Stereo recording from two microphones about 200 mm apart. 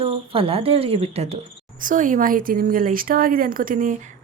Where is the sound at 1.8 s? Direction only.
40° right (ahead or behind).